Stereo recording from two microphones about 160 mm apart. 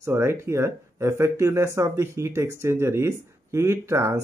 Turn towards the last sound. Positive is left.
turn(degrees=-15)  # may be behind; listen again after turning